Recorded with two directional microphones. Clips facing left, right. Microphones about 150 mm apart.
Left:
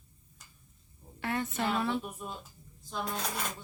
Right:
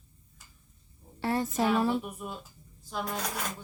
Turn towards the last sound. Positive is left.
turn(degrees=-10)  # may be behind; listen again after turning